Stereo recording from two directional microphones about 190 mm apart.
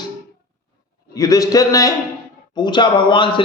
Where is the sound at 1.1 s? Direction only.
20° left (ahead or behind).